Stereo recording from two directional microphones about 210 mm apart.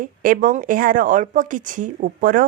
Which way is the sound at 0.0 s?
40° right (ahead or behind).